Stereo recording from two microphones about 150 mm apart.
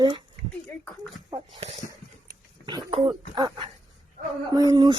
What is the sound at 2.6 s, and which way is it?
Speech, 30° right (ahead or behind).